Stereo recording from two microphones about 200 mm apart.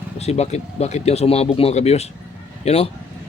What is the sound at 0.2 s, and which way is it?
A man's voice, 30° left (ahead or behind).